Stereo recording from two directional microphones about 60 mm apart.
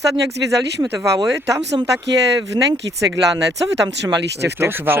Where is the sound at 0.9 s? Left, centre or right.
Right.